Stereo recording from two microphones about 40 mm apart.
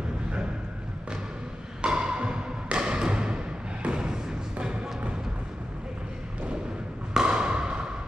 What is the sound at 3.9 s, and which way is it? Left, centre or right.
Thump, centre.